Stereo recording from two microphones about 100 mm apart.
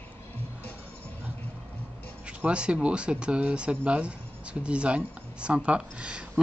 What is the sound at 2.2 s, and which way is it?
Speech, 10° right (ahead or behind).